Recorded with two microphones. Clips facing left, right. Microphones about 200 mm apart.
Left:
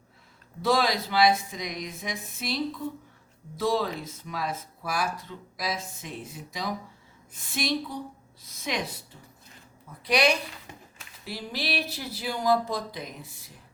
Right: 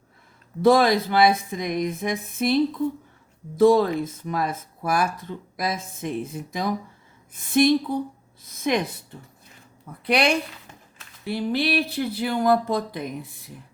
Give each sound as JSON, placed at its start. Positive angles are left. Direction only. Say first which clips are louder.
{"t": 0.6, "sound": "speech", "louder": "right 8 dB", "side_deg": -55}
{"t": 9.8, "sound": "a woman's voice", "louder": "right 2 dB", "side_deg": -55}